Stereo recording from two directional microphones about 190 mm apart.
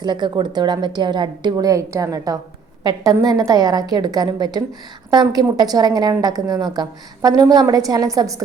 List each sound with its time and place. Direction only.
0.0 s a woman's voice: 25° right (ahead or behind)